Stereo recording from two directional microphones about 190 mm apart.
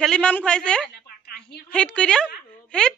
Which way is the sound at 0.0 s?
5° left (ahead or behind).